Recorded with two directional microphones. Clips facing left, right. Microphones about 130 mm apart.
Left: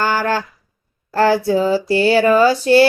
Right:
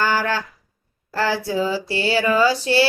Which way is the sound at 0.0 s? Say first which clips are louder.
Left 3 dB; 50° left (ahead or behind).